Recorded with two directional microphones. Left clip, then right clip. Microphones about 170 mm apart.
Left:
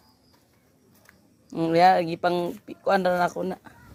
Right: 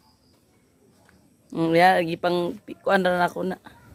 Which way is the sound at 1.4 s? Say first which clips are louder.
Right 1 dB; 15° right (ahead or behind).